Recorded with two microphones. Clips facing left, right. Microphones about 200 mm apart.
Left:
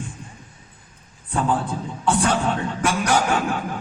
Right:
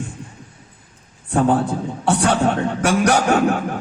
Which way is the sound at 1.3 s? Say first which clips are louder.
Right 6 dB; 45° right (ahead or behind).